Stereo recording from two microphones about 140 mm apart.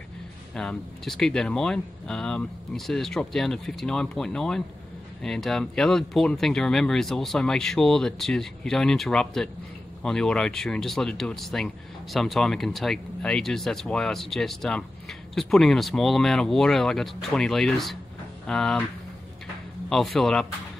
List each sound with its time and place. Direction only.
0.6 s speech: 5° left (ahead or behind)
19.9 s speech: centre (ahead or behind)